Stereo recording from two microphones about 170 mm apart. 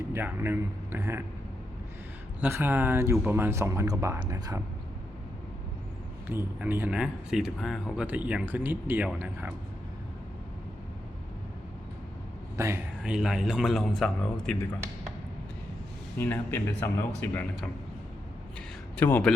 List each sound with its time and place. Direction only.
0.1 s speech: 15° right (ahead or behind)
2.4 s speech: 10° right (ahead or behind)
6.2 s speech: 10° right (ahead or behind)
12.5 s a man's voice: 15° right (ahead or behind)
13.0 s a man's voice: 5° right (ahead or behind)
16.1 s speech: 15° left (ahead or behind)
18.9 s speech: 10° left (ahead or behind)